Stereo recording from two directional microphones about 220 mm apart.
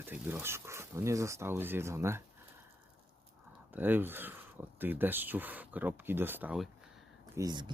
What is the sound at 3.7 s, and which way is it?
Speech, 10° right (ahead or behind).